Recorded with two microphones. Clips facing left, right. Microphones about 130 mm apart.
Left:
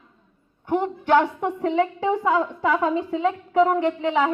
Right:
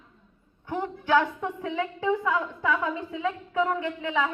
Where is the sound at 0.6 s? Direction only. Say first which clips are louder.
Left 7 dB; 60° left (ahead or behind).